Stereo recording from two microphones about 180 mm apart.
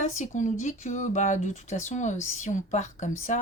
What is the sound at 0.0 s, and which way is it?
Speech, 45° left (ahead or behind).